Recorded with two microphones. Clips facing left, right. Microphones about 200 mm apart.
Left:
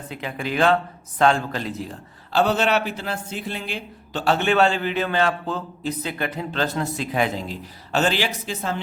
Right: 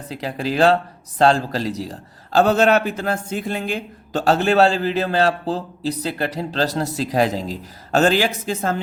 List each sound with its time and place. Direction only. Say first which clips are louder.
0.1 s a man's voice: right 4 dB; 35° right (ahead or behind)